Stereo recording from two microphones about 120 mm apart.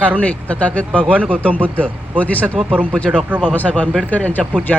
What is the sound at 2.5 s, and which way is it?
A man's voice, 15° right (ahead or behind).